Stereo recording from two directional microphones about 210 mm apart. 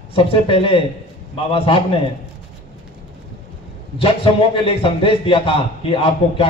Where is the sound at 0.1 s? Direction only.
25° left (ahead or behind).